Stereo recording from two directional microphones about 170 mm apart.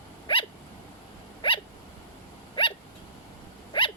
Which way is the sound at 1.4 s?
30° left (ahead or behind).